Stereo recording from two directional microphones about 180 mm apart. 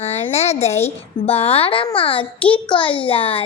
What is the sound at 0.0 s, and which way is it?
A woman's voice, 35° left (ahead or behind).